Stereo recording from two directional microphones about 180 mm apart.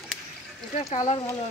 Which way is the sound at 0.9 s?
40° left (ahead or behind).